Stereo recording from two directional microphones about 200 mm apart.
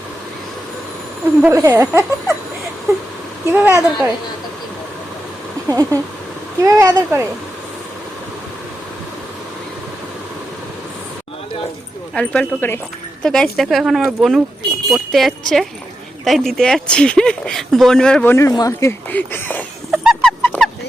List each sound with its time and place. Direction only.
1.4 s speech: 10° right (ahead or behind)
3.5 s speech: 10° right (ahead or behind)
5.6 s speech: 15° right (ahead or behind)
12.1 s speech: 5° left (ahead or behind)
19.9 s dog: centre (ahead or behind)
20.4 s rodents: 10° left (ahead or behind)